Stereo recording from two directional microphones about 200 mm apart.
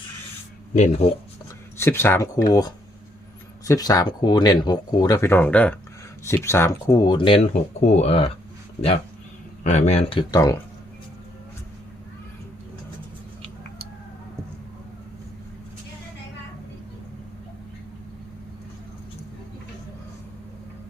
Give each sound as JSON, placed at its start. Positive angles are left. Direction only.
{"t": 0.7, "sound": "speech", "side_deg": 35}
{"t": 1.8, "sound": "speech", "side_deg": 10}
{"t": 9.6, "sound": "speech", "side_deg": 35}